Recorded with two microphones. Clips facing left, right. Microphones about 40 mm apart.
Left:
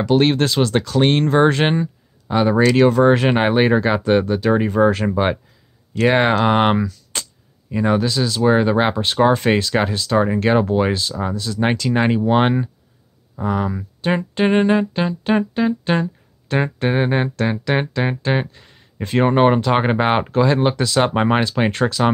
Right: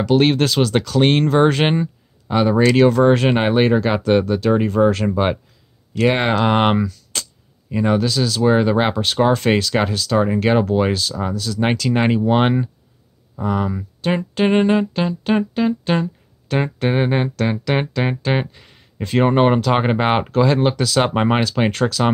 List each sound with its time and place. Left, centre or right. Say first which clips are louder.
0.2 s speech: even; centre
3.0 s speech: even; centre
8.0 s speech: even; centre
10.2 s speech: right 1 dB; centre
10.8 s speech: even; centre
11.9 s speech: even; centre
21.1 s speech: even; centre
21.5 s speech: even; centre